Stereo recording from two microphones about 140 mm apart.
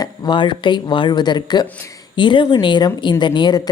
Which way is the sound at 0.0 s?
35° left (ahead or behind).